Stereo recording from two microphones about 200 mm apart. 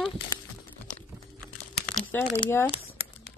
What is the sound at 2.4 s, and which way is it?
Speech, 15° left (ahead or behind).